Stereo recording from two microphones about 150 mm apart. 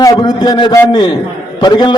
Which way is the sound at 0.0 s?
30° left (ahead or behind).